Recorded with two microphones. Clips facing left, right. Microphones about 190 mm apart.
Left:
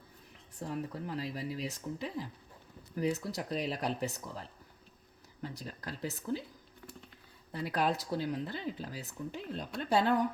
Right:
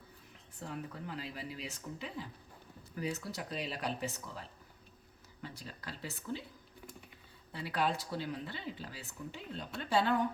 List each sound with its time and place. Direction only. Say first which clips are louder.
0.7 s speech: left 5 dB; 40° left (ahead or behind)
5.4 s speech: left 5 dB; 45° left (ahead or behind)
7.5 s speech: left 3 dB; 45° left (ahead or behind)